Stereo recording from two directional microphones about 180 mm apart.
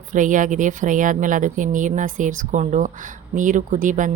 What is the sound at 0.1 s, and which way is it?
Speech, 45° right (ahead or behind).